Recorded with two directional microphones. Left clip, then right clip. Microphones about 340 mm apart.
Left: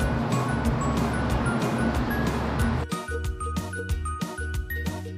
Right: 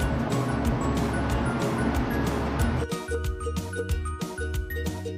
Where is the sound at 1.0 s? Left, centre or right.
Centre.